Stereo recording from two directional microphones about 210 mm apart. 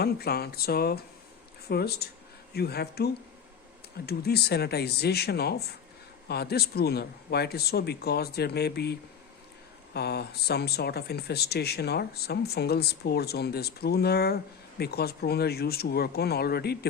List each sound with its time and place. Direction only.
0.0 s speech: 50° left (ahead or behind)